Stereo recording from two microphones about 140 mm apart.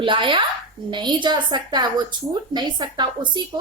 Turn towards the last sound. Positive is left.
turn(degrees=-30)  # may be behind; listen again after turning